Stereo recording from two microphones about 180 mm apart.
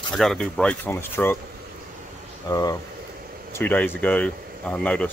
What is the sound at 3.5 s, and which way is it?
Speech, 10° left (ahead or behind).